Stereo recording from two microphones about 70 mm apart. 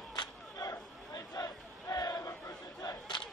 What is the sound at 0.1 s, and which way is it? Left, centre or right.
Crowd, left.